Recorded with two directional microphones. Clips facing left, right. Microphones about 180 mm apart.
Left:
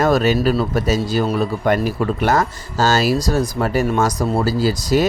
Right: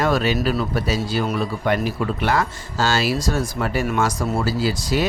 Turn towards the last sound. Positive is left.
turn(degrees=40)  # may be behind; listen again after turning